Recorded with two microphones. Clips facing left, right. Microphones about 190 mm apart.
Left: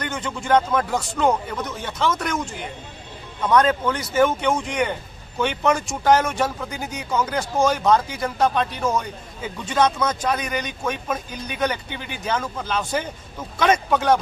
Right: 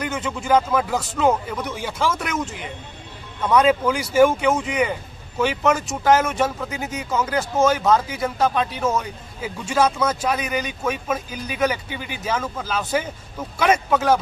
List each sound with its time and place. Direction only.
0.0 s speech: 5° right (ahead or behind)